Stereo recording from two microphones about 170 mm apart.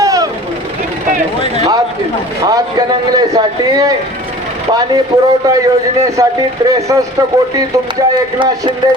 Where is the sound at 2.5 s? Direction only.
25° right (ahead or behind).